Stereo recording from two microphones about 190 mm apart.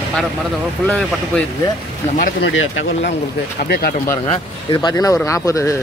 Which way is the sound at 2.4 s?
85° left.